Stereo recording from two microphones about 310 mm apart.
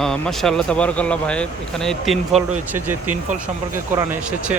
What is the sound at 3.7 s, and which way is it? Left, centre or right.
Speech, centre.